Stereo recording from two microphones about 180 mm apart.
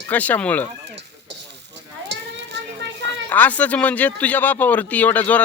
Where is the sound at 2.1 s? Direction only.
70° right (ahead or behind).